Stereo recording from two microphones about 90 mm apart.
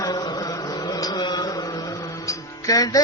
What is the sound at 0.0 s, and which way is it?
Music, 45° left (ahead or behind).